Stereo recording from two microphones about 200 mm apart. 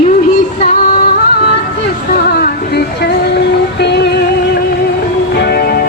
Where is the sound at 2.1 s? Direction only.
50° left (ahead or behind).